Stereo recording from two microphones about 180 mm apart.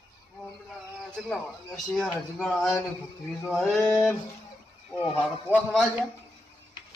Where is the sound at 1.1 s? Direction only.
Centre (ahead or behind).